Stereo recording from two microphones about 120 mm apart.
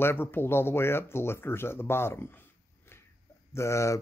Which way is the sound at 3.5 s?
25° left (ahead or behind).